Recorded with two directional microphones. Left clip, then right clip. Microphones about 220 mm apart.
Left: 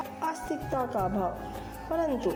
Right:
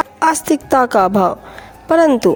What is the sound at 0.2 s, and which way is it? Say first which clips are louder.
Speech: right 18 dB; 45° right (ahead or behind).